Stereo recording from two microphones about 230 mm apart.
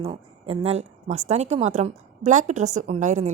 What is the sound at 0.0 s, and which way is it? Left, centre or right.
A woman's voice, right.